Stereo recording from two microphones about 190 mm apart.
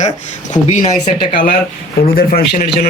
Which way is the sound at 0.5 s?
40° left (ahead or behind).